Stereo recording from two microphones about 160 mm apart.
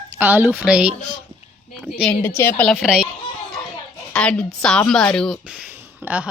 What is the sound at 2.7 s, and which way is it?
Speech, 5° right (ahead or behind).